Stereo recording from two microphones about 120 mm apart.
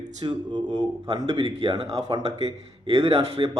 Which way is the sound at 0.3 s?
35° right (ahead or behind).